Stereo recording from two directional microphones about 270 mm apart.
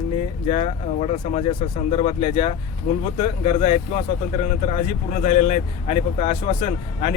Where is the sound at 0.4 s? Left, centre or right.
Left.